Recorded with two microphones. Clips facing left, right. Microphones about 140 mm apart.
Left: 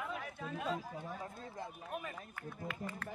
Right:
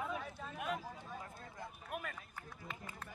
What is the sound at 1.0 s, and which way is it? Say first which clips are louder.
Speech: left 4 dB; 20° left (ahead or behind).